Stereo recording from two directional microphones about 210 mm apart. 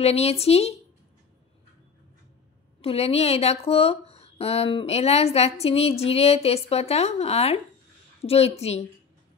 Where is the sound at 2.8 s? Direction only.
30° left (ahead or behind).